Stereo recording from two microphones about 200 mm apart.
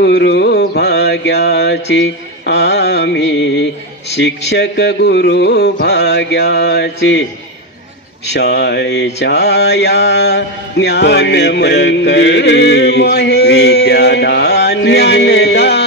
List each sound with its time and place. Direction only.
0.0 s mantra: 55° left (ahead or behind)
8.3 s mantra: 55° left (ahead or behind)